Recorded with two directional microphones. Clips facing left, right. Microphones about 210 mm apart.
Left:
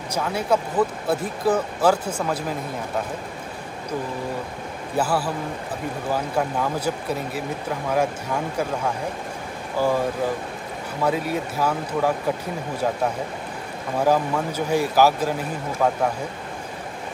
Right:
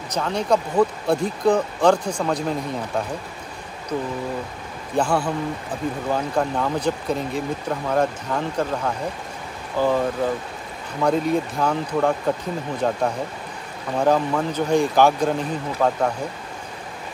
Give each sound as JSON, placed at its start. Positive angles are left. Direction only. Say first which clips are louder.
{"t": 0.1, "sound": "speech", "louder": "right 1 dB", "side_deg": 5}
{"t": 4.9, "sound": "speech", "louder": "right 2 dB", "side_deg": 5}
{"t": 11.1, "sound": "speech", "louder": "right 4 dB", "side_deg": 5}